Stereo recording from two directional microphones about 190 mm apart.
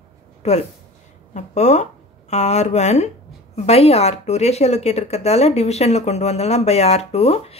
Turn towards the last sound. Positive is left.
turn(degrees=30)  # may be behind; listen again after turning